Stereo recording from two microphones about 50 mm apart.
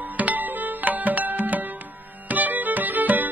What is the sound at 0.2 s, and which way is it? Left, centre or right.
Music, right.